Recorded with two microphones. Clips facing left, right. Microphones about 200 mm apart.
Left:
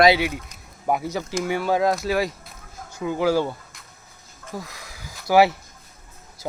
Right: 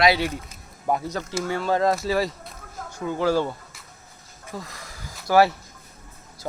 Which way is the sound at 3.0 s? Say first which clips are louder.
Left 1 dB; 10° left (ahead or behind).